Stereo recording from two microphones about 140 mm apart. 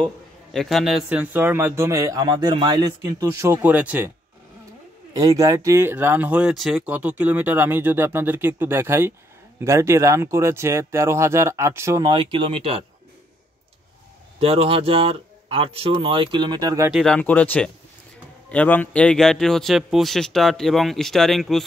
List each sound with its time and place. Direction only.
0.0 s a man's voice: 5° left (ahead or behind)
5.1 s a man's voice: 25° right (ahead or behind); by 6.8 s centre (ahead or behind)
6.9 s a man's voice: 10° right (ahead or behind)
12.1 s speech: 40° right (ahead or behind)
14.4 s speech: 45° right (ahead or behind); by 16.9 s 25° right (ahead or behind)
16.9 s speech: 5° left (ahead or behind)